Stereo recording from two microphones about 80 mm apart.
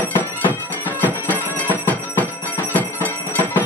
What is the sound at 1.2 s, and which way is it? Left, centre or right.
Bell, left.